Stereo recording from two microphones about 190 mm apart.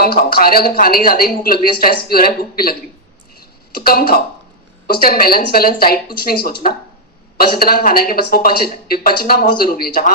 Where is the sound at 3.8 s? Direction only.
50° left (ahead or behind).